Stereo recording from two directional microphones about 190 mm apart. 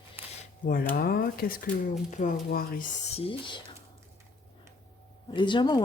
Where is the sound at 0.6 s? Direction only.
45° left (ahead or behind).